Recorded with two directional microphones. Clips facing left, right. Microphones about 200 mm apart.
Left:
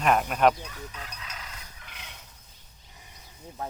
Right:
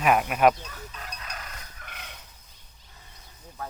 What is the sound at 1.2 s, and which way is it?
Fowl, 55° right (ahead or behind).